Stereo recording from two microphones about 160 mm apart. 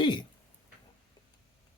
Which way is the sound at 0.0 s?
30° left (ahead or behind).